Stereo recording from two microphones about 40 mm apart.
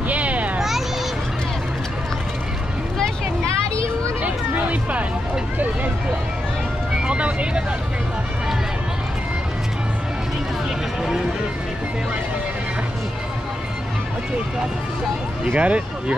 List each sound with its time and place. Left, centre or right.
0.1 s a sound: right
0.6 s children playing: centre
4.2 s music: right
7.0 s vehicle: right
15.5 s speech: right